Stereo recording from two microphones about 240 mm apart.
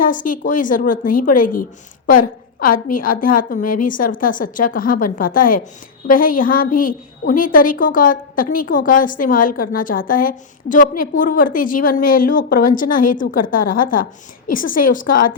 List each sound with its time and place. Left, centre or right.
0.0 s a woman's voice: left